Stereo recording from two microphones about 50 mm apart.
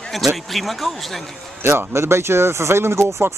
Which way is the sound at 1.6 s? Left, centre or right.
Right.